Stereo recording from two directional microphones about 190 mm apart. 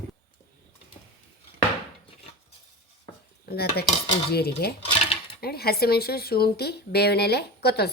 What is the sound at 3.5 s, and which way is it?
Cutlery, 55° left (ahead or behind).